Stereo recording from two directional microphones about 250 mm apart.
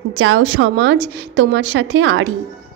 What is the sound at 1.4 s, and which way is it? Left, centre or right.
Speech, right.